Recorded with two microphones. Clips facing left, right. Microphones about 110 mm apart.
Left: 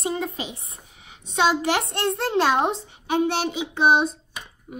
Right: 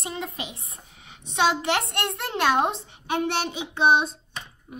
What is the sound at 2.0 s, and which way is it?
Speech, 30° left (ahead or behind).